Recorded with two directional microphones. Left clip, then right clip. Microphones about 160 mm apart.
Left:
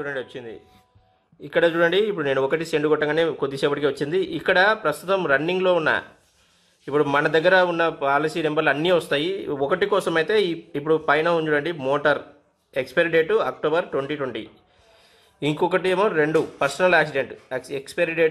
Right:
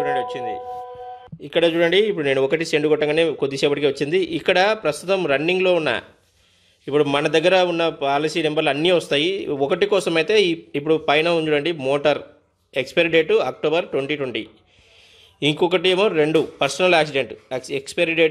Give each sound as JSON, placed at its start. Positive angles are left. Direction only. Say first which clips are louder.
{"t": 1.4, "sound": "a man's voice", "louder": "right 1 dB", "side_deg": -35}
{"t": 7.1, "sound": "a man's voice", "louder": "left 1 dB", "side_deg": -40}
{"t": 15.5, "sound": "speech", "louder": "right 2 dB", "side_deg": -40}